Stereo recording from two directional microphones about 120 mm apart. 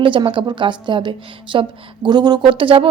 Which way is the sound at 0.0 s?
45° right (ahead or behind).